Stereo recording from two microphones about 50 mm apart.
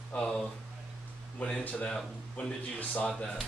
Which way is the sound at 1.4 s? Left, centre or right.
Left.